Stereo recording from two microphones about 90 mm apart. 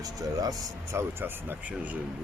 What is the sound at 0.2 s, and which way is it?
Speech, 45° right (ahead or behind).